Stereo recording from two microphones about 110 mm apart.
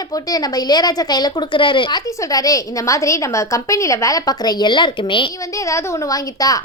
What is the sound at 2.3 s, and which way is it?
A woman's voice, 30° left (ahead or behind).